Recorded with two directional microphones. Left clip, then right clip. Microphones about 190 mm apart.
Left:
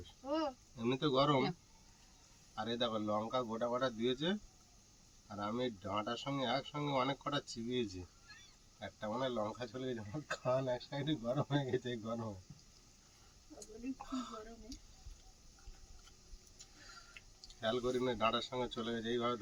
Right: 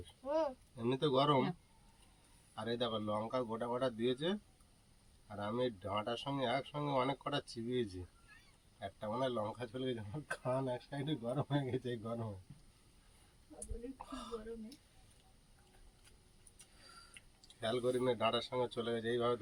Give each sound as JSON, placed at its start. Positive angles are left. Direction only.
{"t": 0.3, "sound": "a sound", "side_deg": 5}
{"t": 0.8, "sound": "speech", "side_deg": -20}
{"t": 2.6, "sound": "speech", "side_deg": -15}
{"t": 5.4, "sound": "speech", "side_deg": -20}
{"t": 17.6, "sound": "speech", "side_deg": -20}